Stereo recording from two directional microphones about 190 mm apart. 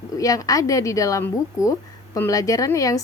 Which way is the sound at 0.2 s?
20° left (ahead or behind).